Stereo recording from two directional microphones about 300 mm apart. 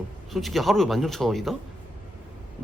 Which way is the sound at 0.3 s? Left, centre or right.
Centre.